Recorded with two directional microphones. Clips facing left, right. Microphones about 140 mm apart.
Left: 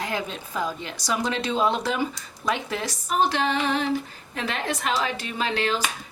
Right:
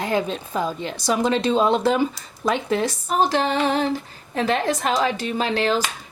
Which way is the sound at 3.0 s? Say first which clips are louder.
Right 1 dB; 40° right (ahead or behind).